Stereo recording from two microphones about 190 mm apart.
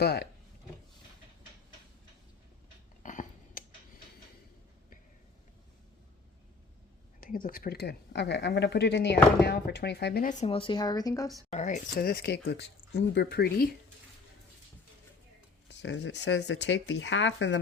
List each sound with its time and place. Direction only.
0.0 s speech: 60° left (ahead or behind)
3.0 s a sound: 40° left (ahead or behind)
7.2 s speech: 45° left (ahead or behind)
10.2 s speech: 30° left (ahead or behind)
11.5 s speech: 40° left (ahead or behind); by 13.7 s 55° left (ahead or behind)
15.8 s speech: 70° left (ahead or behind)